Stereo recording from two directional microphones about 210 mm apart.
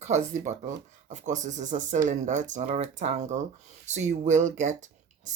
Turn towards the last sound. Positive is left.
turn(degrees=-35)  # may be behind; listen again after turning